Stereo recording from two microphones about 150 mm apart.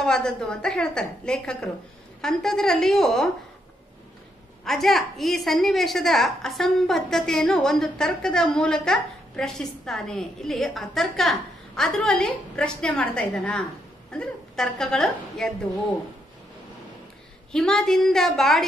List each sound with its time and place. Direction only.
0.0 s a woman's voice: 5° left (ahead or behind)
4.6 s a woman's voice: centre (ahead or behind)
17.5 s a woman's voice: 5° left (ahead or behind)